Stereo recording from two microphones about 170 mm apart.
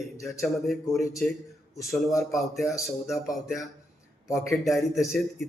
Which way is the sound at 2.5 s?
20° left (ahead or behind).